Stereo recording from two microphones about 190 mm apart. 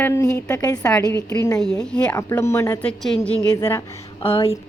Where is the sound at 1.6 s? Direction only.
5° left (ahead or behind).